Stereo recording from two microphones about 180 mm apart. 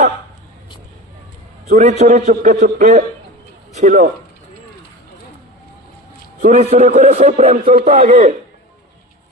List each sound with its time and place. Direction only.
1.7 s a man's voice: 40° right (ahead or behind)
6.4 s a man's voice: 35° right (ahead or behind)